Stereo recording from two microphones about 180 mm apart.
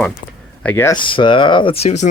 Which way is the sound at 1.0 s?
25° left (ahead or behind).